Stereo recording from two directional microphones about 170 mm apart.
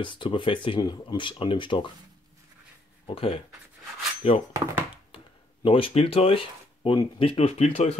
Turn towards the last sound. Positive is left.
turn(degrees=40)  # may be behind; listen again after turning